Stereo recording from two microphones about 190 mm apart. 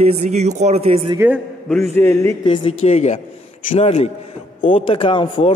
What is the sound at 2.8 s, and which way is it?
A man's voice, 35° left (ahead or behind).